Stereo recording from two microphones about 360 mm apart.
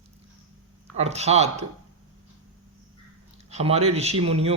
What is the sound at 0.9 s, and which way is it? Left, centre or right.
Speech, centre.